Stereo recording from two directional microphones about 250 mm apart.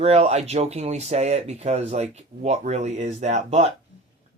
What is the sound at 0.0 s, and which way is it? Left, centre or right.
Speech, right.